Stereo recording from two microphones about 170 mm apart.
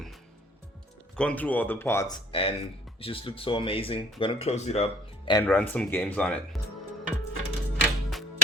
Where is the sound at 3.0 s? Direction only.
30° left (ahead or behind).